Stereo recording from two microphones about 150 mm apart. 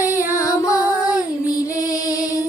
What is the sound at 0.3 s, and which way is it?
Music, 25° left (ahead or behind).